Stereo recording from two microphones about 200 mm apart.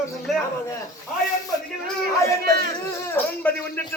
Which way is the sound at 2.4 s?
50° right (ahead or behind).